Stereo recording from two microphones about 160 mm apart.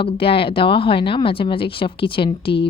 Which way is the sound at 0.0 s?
35° left (ahead or behind).